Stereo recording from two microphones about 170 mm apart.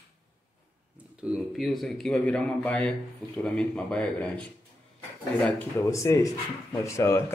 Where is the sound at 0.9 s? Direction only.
5° right (ahead or behind).